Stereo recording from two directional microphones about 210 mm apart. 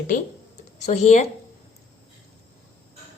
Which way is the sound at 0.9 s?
35° left (ahead or behind).